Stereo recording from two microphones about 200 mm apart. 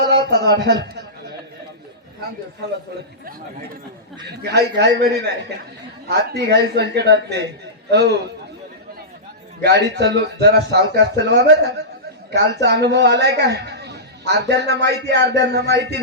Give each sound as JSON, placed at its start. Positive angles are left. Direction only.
{"t": 0.0, "sound": "speech", "side_deg": -55}
{"t": 4.4, "sound": "a man's voice", "side_deg": -55}
{"t": 9.6, "sound": "a man's voice", "side_deg": -55}